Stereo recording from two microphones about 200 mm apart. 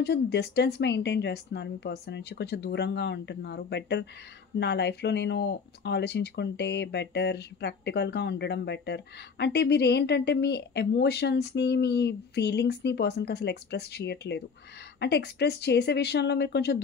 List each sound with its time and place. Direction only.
0.0 s speech: 55° left (ahead or behind)